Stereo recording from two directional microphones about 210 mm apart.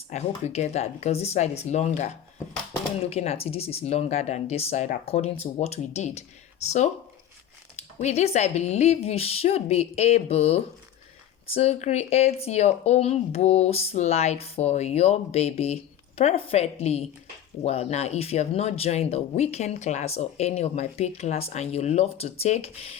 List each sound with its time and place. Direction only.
0.1 s speech: 30° left (ahead or behind)
3.1 s speech: 30° left (ahead or behind)
7.8 s speech: 30° left (ahead or behind)